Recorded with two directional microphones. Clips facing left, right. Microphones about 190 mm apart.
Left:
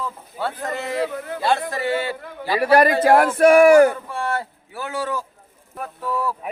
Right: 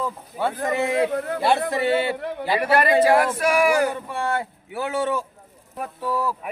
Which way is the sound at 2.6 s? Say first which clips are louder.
Left 6 dB; 40° left (ahead or behind).